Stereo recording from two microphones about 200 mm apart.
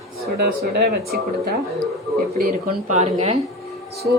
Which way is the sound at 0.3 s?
55° right (ahead or behind).